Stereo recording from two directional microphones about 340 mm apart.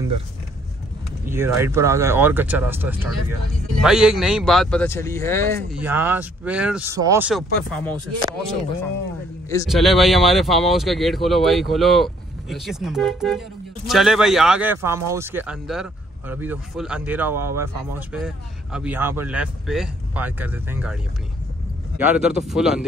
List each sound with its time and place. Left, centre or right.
1.2 s speech: centre
5.7 s speech: centre
9.5 s speech: centre